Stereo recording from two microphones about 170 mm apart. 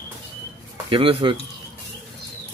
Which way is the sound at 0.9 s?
30° right (ahead or behind).